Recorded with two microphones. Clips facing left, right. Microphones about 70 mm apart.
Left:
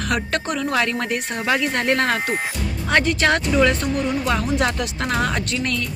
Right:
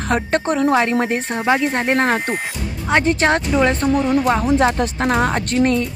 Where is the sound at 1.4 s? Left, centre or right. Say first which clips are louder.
Right 3 dB; right.